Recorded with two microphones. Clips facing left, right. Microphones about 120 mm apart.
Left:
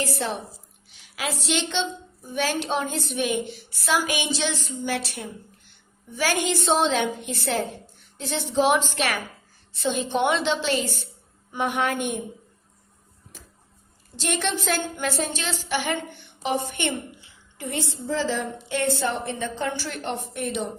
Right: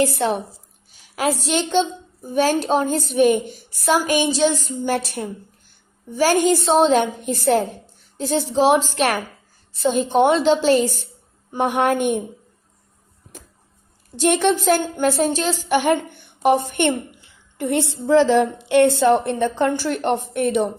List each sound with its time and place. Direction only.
0.0 s a woman's voice: 55° right (ahead or behind)
1.1 s a woman's voice: 45° right (ahead or behind)
14.2 s a woman's voice: 55° right (ahead or behind)